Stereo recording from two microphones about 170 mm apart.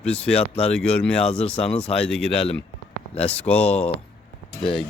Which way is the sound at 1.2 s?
35° left (ahead or behind).